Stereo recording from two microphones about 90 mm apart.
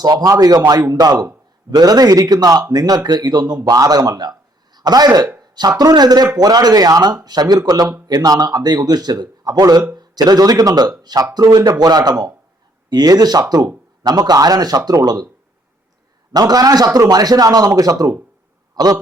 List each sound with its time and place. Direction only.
0.0 s speech: 45° right (ahead or behind)
16.3 s a man's voice: 45° right (ahead or behind)